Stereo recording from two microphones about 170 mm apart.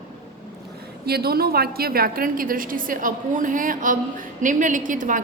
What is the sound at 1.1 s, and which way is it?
A woman's voice, 65° right (ahead or behind).